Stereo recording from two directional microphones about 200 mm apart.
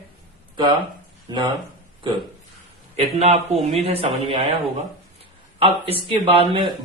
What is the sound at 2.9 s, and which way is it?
A man's voice, 30° right (ahead or behind).